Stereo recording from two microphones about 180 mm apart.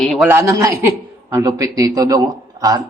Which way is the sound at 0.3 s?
15° right (ahead or behind).